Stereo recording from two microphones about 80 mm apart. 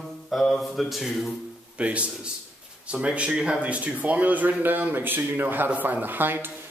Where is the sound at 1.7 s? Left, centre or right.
Centre.